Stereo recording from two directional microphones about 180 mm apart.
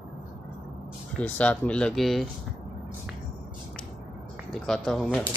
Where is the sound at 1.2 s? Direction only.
5° left (ahead or behind).